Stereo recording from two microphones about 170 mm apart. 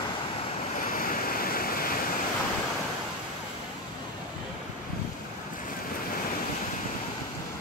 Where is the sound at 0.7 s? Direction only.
55° left (ahead or behind).